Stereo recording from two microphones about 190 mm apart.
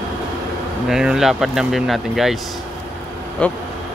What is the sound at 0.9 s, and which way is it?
Speech, centre (ahead or behind).